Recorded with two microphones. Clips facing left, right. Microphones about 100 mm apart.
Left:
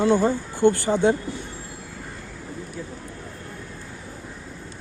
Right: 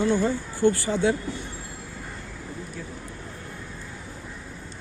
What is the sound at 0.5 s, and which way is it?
Speech, 60° left (ahead or behind).